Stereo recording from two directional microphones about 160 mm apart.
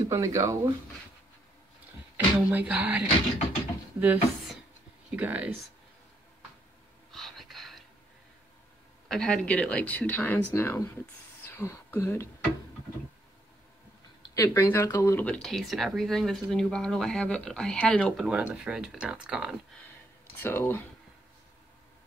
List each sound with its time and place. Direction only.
0.1 s speech: 20° right (ahead or behind)
2.1 s speech: 10° right (ahead or behind)
7.1 s gasp: centre (ahead or behind)
9.1 s speech: 5° left (ahead or behind)
14.2 s speech: 20° left (ahead or behind); by 19.5 s 5° right (ahead or behind)
20.4 s speech: 15° left (ahead or behind)